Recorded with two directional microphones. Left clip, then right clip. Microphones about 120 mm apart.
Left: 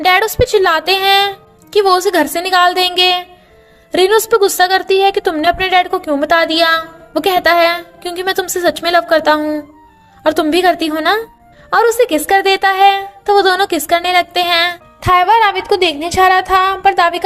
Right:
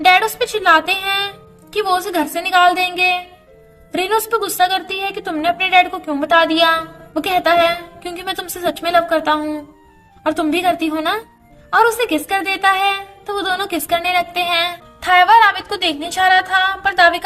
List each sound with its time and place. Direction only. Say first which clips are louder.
0.0 s a woman's voice: left 2 dB; 65° left (ahead or behind)
10.5 s a woman's voice: left 5 dB; 55° left (ahead or behind)